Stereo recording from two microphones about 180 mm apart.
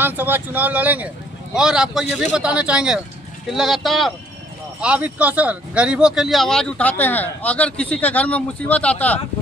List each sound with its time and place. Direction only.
0.0 s a man's voice: 10° right (ahead or behind); by 9.2 s 10° left (ahead or behind)